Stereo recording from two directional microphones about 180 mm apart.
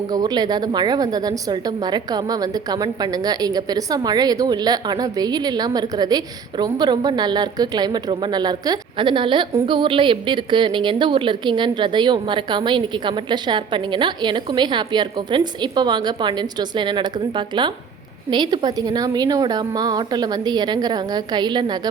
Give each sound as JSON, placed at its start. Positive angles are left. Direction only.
{"t": 0.1, "sound": "a woman's voice", "side_deg": -20}